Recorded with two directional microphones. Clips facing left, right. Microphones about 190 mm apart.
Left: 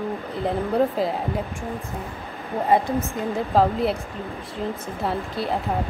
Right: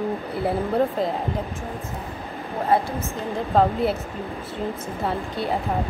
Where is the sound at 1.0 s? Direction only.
5° left (ahead or behind).